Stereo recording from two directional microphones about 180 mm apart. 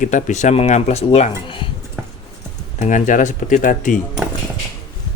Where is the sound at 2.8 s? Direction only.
45° left (ahead or behind).